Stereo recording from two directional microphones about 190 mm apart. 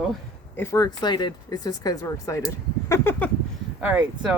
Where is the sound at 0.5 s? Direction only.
15° left (ahead or behind).